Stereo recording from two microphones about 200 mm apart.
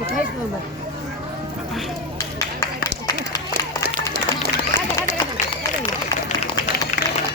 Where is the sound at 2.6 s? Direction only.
15° left (ahead or behind).